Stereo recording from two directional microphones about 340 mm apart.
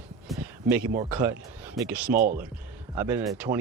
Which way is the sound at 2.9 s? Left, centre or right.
Centre.